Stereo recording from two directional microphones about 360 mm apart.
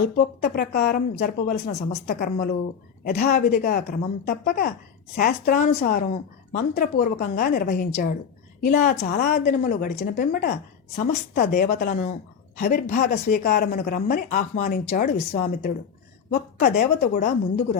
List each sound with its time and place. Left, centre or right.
0.4 s a woman's voice: left